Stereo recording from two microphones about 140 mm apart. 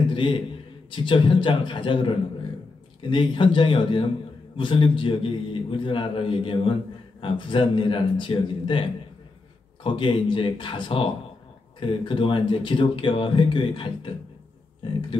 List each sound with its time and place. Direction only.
0.1 s a sound: 35° left (ahead or behind)
0.8 s a man's voice: 35° left (ahead or behind)
9.8 s a man's voice: 35° left (ahead or behind)